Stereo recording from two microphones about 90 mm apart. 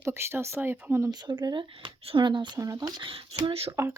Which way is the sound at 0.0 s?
30° right (ahead or behind).